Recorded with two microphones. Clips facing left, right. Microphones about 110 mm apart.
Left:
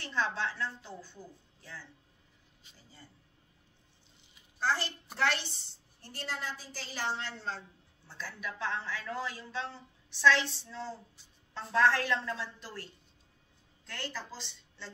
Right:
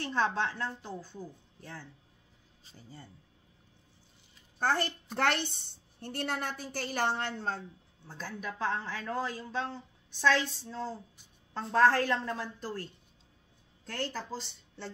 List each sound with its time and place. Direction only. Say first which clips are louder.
0.0 s speech: right 3 dB; 45° right (ahead or behind)
4.6 s a woman's voice: right 3 dB; 55° right (ahead or behind)